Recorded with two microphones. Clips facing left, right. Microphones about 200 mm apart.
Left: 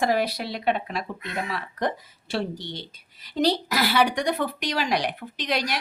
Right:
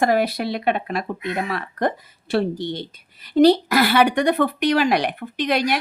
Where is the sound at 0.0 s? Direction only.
55° right (ahead or behind).